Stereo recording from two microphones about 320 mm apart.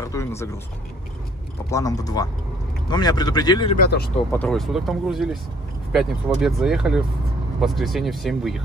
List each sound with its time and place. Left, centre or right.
0.0 s speech: centre
1.7 s speech: centre
3.8 s speech: left
4.3 s speech: centre